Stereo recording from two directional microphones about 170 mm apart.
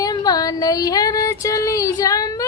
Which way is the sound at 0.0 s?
20° left (ahead or behind).